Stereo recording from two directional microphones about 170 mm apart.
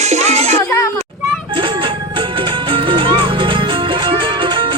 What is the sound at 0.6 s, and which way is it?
Speech, 20° left (ahead or behind).